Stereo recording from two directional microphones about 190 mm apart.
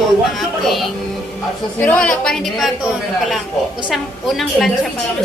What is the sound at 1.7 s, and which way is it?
Speech, 5° left (ahead or behind).